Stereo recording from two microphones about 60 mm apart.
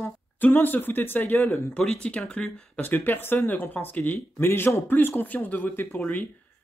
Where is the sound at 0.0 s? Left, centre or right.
Left.